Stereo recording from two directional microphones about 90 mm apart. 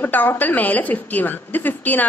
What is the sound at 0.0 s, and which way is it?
A woman's voice, 20° left (ahead or behind).